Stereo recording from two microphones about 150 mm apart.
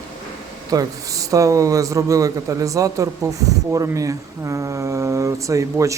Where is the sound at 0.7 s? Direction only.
25° right (ahead or behind).